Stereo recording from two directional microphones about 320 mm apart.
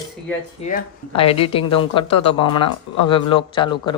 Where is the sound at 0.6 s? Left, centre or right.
Centre.